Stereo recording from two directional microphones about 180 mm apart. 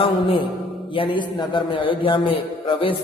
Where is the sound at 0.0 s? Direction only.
30° left (ahead or behind).